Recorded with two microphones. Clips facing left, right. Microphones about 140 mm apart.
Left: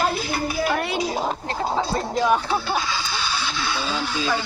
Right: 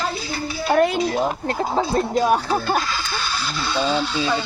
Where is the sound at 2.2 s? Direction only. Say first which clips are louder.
Right 2 dB; 40° right (ahead or behind).